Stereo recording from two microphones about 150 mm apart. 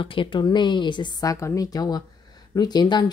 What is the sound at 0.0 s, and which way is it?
Speech, 35° left (ahead or behind).